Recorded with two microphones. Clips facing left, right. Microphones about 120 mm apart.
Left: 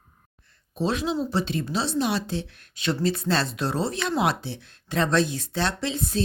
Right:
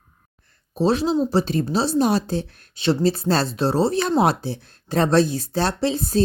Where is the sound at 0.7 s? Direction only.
35° right (ahead or behind).